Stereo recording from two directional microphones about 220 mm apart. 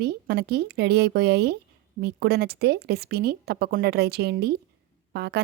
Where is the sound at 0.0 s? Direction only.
45° right (ahead or behind).